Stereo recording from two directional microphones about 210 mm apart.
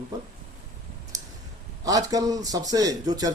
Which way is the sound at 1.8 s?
15° right (ahead or behind).